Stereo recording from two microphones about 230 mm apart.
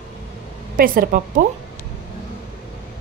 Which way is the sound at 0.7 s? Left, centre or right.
Right.